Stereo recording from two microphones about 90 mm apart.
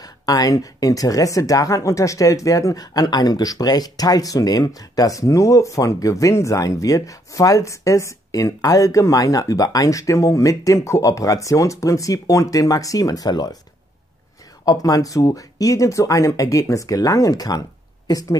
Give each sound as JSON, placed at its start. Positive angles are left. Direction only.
{"t": 0.2, "sound": "speech", "side_deg": 45}
{"t": 14.6, "sound": "speech", "side_deg": 40}